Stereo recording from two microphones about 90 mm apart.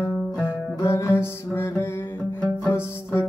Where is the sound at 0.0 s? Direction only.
25° left (ahead or behind).